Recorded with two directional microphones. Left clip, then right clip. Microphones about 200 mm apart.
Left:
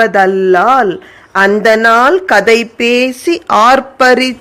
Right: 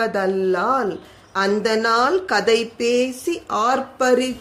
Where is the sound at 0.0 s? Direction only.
30° left (ahead or behind).